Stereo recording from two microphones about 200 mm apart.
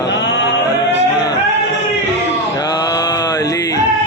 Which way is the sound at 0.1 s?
60° left (ahead or behind).